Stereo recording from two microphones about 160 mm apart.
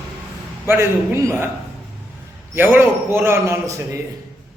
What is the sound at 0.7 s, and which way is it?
Speech, 15° right (ahead or behind).